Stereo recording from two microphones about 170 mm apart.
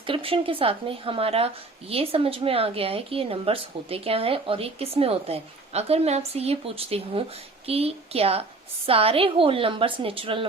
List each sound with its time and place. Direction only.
0.0 s a woman's voice: 30° right (ahead or behind)